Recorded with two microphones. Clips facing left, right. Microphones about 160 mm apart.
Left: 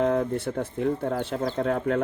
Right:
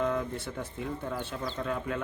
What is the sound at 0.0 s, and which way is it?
Speech, 60° left (ahead or behind).